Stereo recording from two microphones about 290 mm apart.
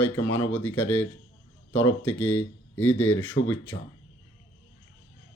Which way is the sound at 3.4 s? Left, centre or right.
Left.